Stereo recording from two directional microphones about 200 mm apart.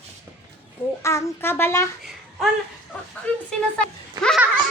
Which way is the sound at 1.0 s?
15° left (ahead or behind).